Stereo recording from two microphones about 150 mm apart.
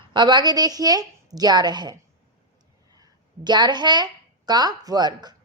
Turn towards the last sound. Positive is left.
turn(degrees=-30)  # may be behind; listen again after turning